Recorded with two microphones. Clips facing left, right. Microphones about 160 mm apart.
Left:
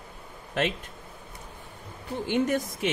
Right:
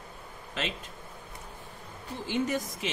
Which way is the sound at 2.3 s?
60° left (ahead or behind).